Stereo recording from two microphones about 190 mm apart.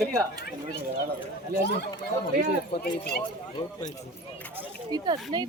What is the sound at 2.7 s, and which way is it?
Speech, 55° left (ahead or behind).